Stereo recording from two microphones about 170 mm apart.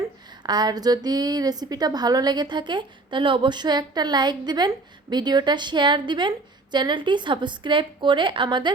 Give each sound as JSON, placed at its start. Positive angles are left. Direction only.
{"t": 0.4, "sound": "a woman's voice", "side_deg": -25}